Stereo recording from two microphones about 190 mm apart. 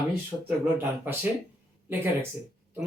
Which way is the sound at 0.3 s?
10° right (ahead or behind).